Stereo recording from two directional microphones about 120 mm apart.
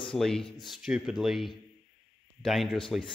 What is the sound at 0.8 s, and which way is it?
Speech, 5° right (ahead or behind).